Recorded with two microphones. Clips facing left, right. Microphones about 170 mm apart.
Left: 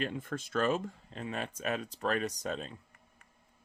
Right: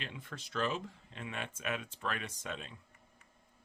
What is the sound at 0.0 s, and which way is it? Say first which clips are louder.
Speech: left 10 dB; 45° left (ahead or behind).